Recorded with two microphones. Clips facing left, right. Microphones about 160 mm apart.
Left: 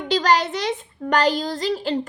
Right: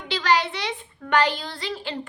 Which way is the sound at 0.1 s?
45° left (ahead or behind).